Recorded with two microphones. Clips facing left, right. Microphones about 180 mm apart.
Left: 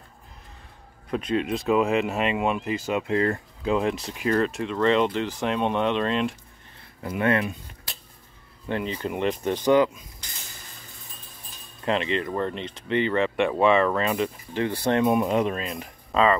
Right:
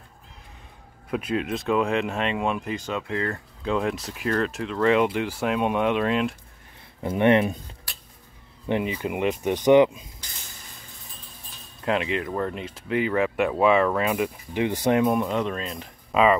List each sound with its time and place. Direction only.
1.1 s speech: 5° right (ahead or behind)
3.0 s speech: 25° left (ahead or behind)
3.6 s speech: centre (ahead or behind)
7.0 s speech: 25° right (ahead or behind)
8.6 s speech: 15° right (ahead or behind)
11.8 s speech: 5° right (ahead or behind)
15.2 s speech: 10° left (ahead or behind)
16.1 s speech: 10° right (ahead or behind)